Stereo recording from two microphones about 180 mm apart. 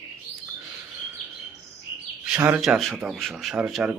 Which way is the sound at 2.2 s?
5° right (ahead or behind).